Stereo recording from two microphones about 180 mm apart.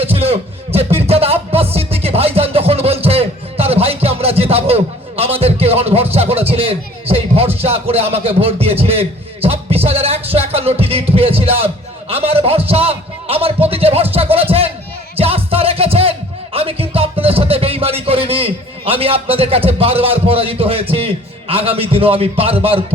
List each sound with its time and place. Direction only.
0.0 s music: 35° right (ahead or behind)
6.1 s speech: 35° right (ahead or behind)